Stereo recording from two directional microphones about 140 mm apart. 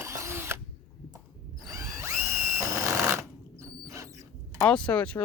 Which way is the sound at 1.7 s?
15° right (ahead or behind).